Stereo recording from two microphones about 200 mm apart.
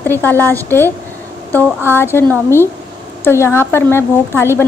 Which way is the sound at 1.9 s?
10° left (ahead or behind).